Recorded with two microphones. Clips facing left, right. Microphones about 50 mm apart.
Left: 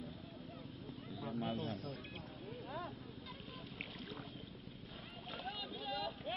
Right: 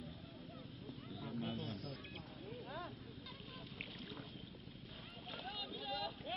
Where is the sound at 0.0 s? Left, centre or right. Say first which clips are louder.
Left 3 dB; left.